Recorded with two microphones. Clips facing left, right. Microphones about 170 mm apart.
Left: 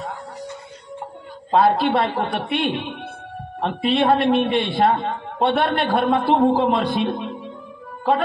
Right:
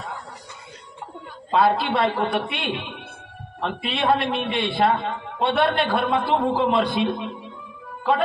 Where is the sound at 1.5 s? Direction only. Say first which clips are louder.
Left 3 dB; 45° left (ahead or behind).